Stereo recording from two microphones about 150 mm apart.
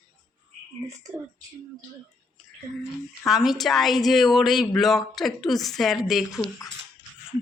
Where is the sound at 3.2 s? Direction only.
Centre (ahead or behind).